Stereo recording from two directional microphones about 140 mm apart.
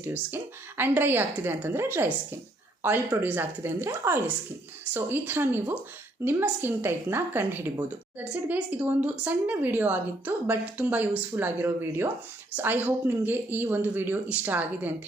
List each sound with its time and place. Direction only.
0.0 s a woman's voice: 15° right (ahead or behind)
3.2 s a woman's voice: 15° right (ahead or behind)